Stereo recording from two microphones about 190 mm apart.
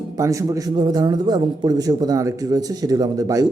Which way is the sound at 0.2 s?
15° right (ahead or behind).